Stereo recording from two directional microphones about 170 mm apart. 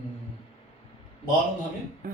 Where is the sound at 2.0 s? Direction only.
55° right (ahead or behind).